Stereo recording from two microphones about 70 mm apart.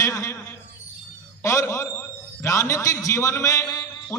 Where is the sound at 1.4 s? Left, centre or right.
Left.